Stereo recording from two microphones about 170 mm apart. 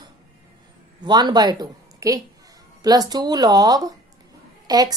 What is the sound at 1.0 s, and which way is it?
A woman's voice, 25° right (ahead or behind).